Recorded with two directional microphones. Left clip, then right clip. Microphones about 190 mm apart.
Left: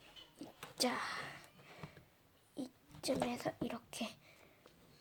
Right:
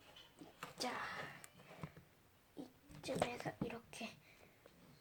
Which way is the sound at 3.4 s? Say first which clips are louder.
Left 5 dB; 55° left (ahead or behind).